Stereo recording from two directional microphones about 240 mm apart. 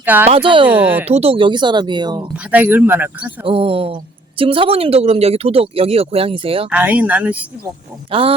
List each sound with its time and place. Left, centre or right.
0.0 s speech: centre
0.3 s speech: right
0.7 s speech: centre
1.0 s speech: right
2.3 s speech: centre
3.4 s speech: right
6.7 s speech: centre
8.1 s speech: right